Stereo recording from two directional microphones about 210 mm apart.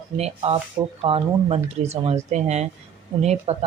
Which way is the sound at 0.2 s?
30° right (ahead or behind).